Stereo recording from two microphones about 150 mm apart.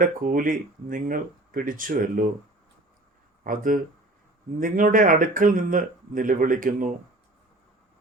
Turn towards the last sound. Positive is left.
turn(degrees=-65)  # may be behind; listen again after turning